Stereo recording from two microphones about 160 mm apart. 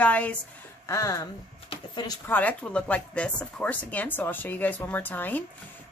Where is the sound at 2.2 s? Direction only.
10° left (ahead or behind).